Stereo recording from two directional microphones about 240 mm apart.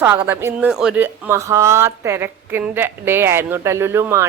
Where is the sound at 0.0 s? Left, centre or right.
Centre.